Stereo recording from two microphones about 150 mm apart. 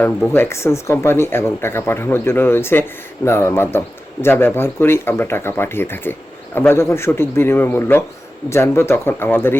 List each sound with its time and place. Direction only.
0.0 s a man's voice: 10° left (ahead or behind)